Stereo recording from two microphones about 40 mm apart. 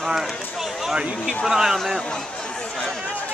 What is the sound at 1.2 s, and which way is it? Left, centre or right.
Speech, centre.